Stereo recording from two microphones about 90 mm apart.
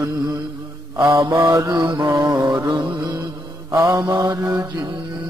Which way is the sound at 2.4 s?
45° right (ahead or behind).